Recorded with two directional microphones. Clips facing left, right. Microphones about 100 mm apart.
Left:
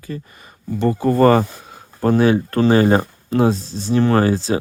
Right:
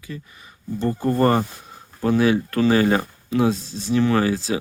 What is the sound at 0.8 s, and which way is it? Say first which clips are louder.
Speech: left 5 dB; 90° left.